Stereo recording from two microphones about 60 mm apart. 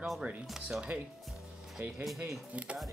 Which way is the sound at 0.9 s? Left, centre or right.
Right.